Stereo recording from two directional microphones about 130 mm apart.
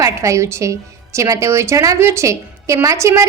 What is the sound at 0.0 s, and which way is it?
A woman's voice, 25° right (ahead or behind).